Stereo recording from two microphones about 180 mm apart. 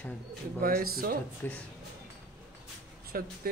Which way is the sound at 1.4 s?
10° left (ahead or behind).